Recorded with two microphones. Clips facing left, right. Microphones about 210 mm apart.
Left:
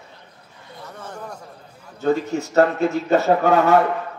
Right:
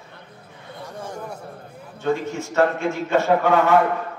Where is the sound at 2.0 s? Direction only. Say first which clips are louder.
Left 3 dB; 40° left (ahead or behind).